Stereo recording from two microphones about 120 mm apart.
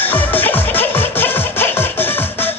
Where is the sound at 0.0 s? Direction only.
15° left (ahead or behind).